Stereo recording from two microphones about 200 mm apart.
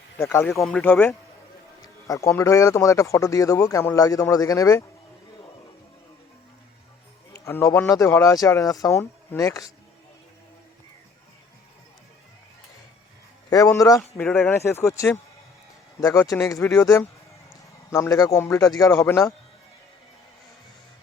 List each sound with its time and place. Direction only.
0.2 s speech: 15° left (ahead or behind)
7.3 s speech: 15° left (ahead or behind)
13.5 s speech: 15° left (ahead or behind)
14.2 s speech: 5° left (ahead or behind)